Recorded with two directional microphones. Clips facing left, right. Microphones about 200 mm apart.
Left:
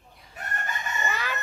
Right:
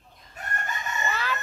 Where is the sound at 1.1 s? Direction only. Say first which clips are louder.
Right 2 dB; 15° left (ahead or behind).